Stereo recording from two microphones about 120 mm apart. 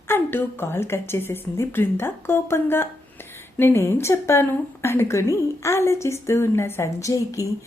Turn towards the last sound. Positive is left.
turn(degrees=25)  # may be behind; listen again after turning